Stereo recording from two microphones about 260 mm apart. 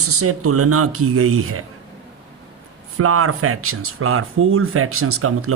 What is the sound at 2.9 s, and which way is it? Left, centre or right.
Speech, right.